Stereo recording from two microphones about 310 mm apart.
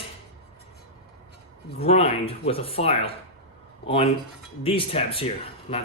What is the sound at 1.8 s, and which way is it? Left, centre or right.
Speech, centre.